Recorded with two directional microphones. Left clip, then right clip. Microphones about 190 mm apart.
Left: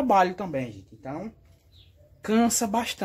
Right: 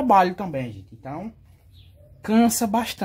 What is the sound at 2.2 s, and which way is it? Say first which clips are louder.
Speech: right 3 dB; 15° right (ahead or behind).